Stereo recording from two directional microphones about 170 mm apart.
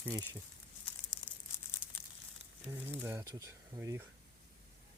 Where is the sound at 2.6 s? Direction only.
15° right (ahead or behind).